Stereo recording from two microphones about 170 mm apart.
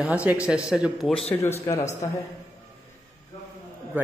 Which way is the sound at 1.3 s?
15° left (ahead or behind).